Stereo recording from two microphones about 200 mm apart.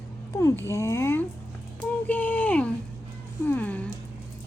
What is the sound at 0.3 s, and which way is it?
Speech, 15° left (ahead or behind).